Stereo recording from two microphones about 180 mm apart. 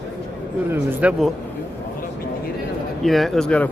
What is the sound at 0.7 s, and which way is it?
Speech, 10° right (ahead or behind).